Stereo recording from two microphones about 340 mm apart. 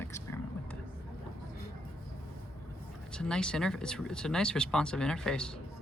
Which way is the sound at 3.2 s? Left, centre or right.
Centre.